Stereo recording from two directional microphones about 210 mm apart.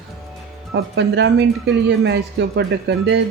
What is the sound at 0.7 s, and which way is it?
Speech, 55° right (ahead or behind).